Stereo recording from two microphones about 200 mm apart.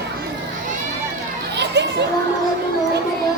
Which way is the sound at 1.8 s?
60° right (ahead or behind).